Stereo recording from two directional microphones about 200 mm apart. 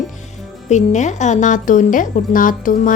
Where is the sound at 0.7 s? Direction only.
35° left (ahead or behind).